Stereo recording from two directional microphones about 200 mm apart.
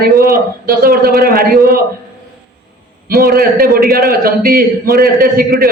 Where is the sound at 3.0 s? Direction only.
50° right (ahead or behind).